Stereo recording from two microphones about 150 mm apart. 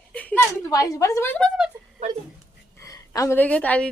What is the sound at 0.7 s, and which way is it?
Speech, 25° left (ahead or behind).